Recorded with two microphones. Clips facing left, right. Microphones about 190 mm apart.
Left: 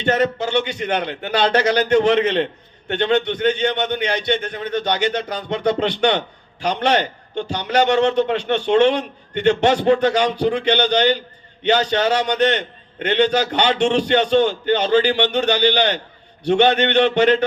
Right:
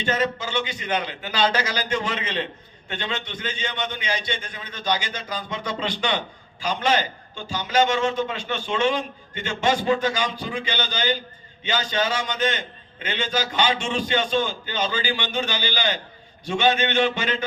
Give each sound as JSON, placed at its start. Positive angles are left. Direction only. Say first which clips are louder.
{"t": 0.0, "sound": "a man's voice", "louder": "left 6 dB", "side_deg": 65}